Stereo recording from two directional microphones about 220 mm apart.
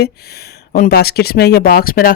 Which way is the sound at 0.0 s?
45° left (ahead or behind).